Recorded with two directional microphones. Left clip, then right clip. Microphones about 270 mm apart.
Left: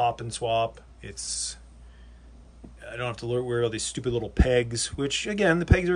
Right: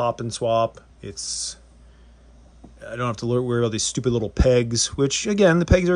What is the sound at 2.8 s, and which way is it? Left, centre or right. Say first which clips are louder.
Speech: right 5 dB; right.